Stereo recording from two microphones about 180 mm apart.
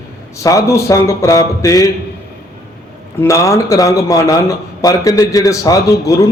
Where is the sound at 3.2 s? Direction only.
15° left (ahead or behind).